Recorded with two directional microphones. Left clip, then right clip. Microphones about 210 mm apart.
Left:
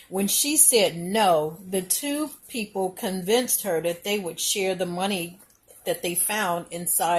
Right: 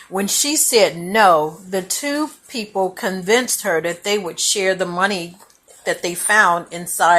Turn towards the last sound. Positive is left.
turn(degrees=0)  # may be behind; listen again after turning